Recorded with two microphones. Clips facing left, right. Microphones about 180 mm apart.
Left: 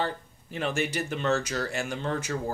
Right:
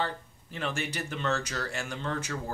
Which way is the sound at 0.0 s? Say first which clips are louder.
Left 2 dB; 15° left (ahead or behind).